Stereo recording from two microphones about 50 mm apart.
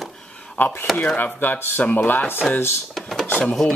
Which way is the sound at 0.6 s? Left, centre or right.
Left.